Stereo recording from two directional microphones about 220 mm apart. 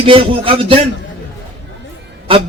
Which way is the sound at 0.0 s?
25° right (ahead or behind).